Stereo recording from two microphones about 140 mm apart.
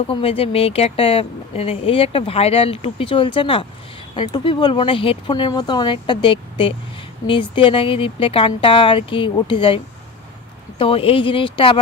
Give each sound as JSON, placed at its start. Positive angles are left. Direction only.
{"t": 0.1, "sound": "speech", "side_deg": 40}